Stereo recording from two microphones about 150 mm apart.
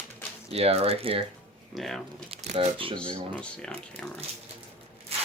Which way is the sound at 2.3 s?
45° right (ahead or behind).